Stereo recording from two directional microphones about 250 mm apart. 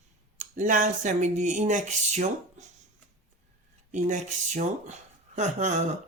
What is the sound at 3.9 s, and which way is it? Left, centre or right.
Speech, right.